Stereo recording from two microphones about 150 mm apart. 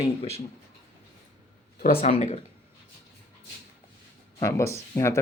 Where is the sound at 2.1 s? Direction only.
50° left (ahead or behind).